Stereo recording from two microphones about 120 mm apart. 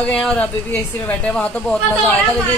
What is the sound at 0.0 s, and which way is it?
Speech, 10° left (ahead or behind).